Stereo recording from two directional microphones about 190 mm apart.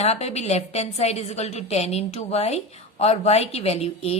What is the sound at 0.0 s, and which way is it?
A woman's voice, 35° left (ahead or behind).